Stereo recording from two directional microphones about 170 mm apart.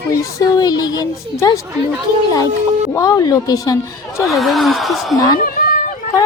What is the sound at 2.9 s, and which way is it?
Speech, 20° left (ahead or behind).